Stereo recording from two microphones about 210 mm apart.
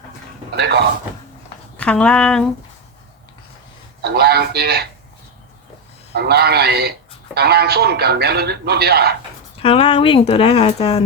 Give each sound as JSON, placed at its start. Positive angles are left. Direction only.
{"t": 0.5, "sound": "speech", "side_deg": -50}
{"t": 1.7, "sound": "speech", "side_deg": 5}
{"t": 4.0, "sound": "speech", "side_deg": -50}
{"t": 6.1, "sound": "speech", "side_deg": -50}
{"t": 9.6, "sound": "speech", "side_deg": 25}